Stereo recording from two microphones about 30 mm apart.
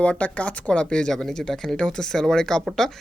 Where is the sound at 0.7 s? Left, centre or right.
Left.